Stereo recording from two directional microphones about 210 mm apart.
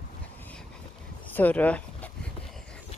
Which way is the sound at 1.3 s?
10° left (ahead or behind).